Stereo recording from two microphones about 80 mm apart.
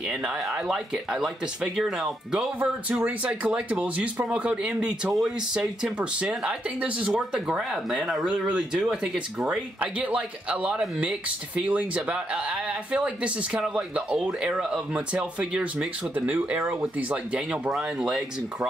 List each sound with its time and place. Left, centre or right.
0.1 s speech: centre
2.9 s speech: centre
9.8 s speech: centre